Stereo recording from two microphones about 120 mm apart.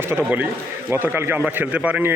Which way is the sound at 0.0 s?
20° right (ahead or behind).